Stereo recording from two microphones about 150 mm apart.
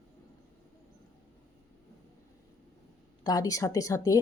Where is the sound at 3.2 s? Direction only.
25° left (ahead or behind).